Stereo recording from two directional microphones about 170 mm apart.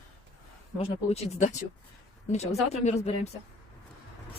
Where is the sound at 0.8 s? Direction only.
40° left (ahead or behind).